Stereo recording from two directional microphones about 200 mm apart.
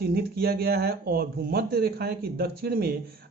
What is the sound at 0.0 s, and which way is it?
Speech, 50° right (ahead or behind).